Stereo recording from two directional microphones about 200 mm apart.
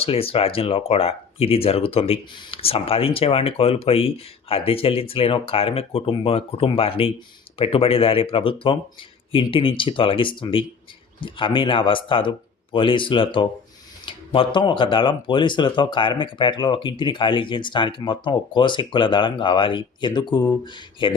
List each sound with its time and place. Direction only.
0.0 s speech: 30° left (ahead or behind)